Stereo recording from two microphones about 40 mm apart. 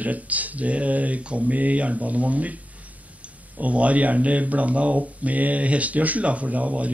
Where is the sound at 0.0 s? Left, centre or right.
Right.